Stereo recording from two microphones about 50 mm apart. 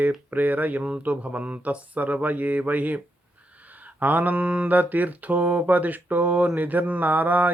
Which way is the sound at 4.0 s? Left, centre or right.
Right.